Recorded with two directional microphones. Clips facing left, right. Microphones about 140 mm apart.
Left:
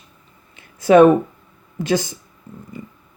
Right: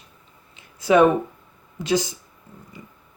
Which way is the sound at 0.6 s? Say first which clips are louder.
Left 5 dB; 55° left (ahead or behind).